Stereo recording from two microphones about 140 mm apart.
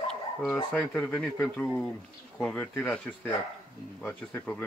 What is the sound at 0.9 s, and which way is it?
Speech, 10° left (ahead or behind).